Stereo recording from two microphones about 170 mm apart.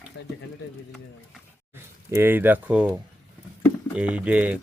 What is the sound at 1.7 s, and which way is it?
Speech, 15° right (ahead or behind).